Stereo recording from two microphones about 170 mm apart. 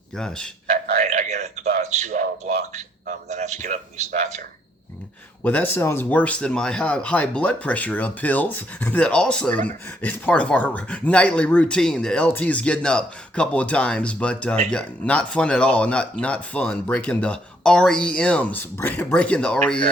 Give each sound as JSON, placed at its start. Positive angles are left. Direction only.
{"t": 0.2, "sound": "speech", "side_deg": 5}
{"t": 0.9, "sound": "a sound", "side_deg": -45}
{"t": 1.8, "sound": "a man's voice", "side_deg": -45}
{"t": 5.4, "sound": "speech", "side_deg": 10}